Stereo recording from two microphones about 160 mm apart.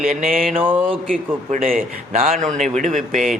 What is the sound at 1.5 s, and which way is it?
A man's voice, 55° right (ahead or behind).